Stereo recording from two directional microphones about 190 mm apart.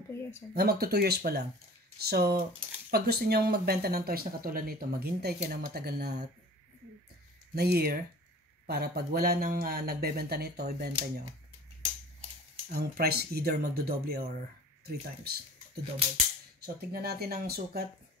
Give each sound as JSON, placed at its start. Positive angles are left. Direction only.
{"t": 0.6, "sound": "speech", "side_deg": -55}
{"t": 7.5, "sound": "speech", "side_deg": -55}
{"t": 12.6, "sound": "speech", "side_deg": -45}